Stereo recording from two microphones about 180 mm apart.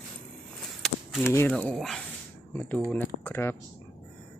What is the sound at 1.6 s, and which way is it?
Speech, centre (ahead or behind).